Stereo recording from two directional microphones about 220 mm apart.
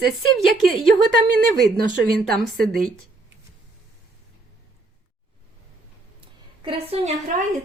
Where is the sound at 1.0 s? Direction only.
45° right (ahead or behind).